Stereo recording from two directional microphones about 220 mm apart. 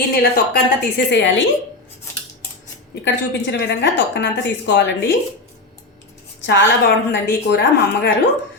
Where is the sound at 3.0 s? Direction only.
50° left (ahead or behind).